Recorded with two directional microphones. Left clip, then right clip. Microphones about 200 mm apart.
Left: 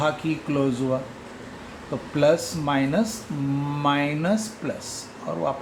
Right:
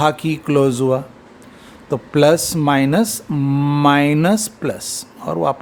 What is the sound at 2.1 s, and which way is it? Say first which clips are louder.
Speech: right 7 dB; 60° right (ahead or behind).